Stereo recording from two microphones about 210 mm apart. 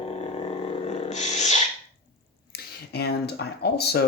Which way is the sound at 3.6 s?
50° left (ahead or behind).